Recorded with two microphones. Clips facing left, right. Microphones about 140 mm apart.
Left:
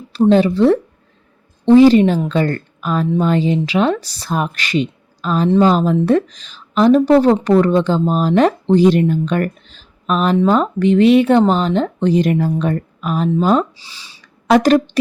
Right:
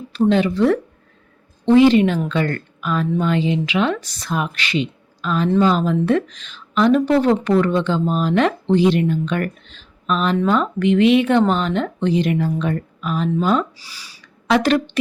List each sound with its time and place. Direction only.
0.1 s speech: 35° left (ahead or behind)
13.7 s speech: 25° left (ahead or behind)
14.4 s speech: 45° left (ahead or behind)